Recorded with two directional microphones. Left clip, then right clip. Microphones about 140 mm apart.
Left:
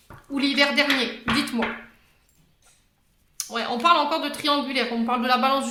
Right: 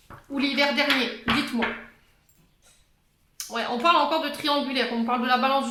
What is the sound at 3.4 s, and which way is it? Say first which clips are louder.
A woman's voice: left 1 dB; 30° left (ahead or behind).